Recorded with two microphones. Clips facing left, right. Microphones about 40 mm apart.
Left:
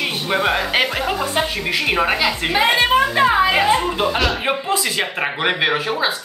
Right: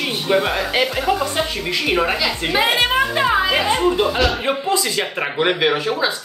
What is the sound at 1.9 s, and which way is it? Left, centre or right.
Speech, centre.